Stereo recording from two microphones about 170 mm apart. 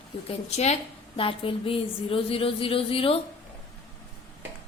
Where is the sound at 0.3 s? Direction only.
40° left (ahead or behind).